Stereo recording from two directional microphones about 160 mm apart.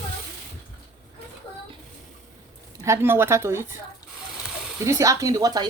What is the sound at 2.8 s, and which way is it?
Speech, 15° right (ahead or behind).